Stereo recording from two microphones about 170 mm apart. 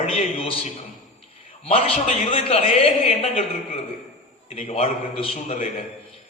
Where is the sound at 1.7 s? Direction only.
35° left (ahead or behind).